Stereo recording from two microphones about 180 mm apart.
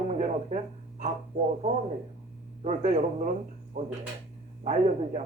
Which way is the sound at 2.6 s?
40° right (ahead or behind).